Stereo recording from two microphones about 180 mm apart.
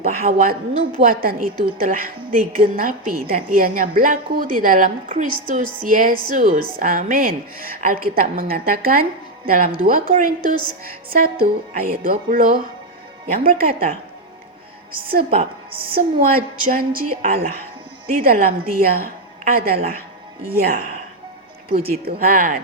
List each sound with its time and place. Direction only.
0.0 s a woman's voice: 50° right (ahead or behind)
15.1 s a woman's voice: 55° right (ahead or behind)
15.7 s speech: 30° right (ahead or behind)
16.0 s a woman's voice: 50° right (ahead or behind)
21.7 s speech: 35° right (ahead or behind)
22.0 s a woman's voice: 55° right (ahead or behind)